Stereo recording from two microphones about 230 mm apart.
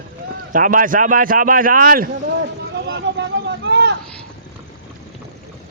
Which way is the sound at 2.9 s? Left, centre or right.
Right.